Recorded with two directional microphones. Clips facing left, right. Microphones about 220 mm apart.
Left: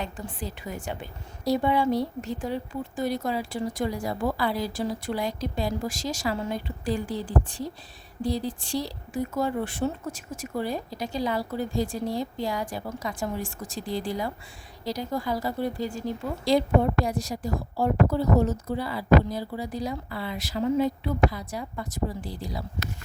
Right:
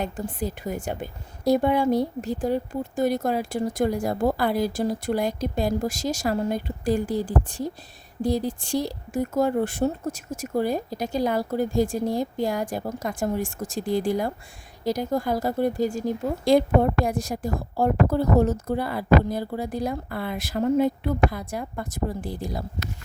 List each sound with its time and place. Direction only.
0.0 s a woman's voice: 45° right (ahead or behind)